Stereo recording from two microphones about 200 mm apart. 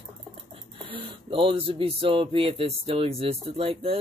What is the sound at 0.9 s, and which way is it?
Speech, 25° right (ahead or behind).